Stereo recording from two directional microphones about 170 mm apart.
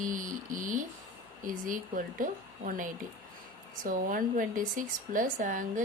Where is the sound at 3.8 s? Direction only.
50° right (ahead or behind).